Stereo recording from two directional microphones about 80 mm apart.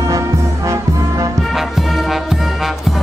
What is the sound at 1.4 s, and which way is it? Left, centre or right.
Music, centre.